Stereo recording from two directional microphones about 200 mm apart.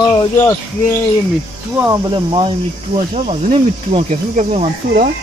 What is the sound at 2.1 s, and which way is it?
Speech, 25° right (ahead or behind).